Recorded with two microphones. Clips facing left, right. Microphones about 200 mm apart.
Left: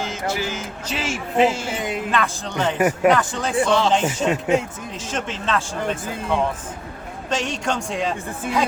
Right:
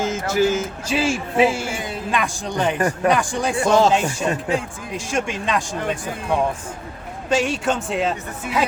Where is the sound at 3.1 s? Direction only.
15° right (ahead or behind).